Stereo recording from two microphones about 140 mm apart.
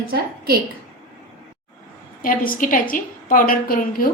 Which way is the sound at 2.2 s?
85° left.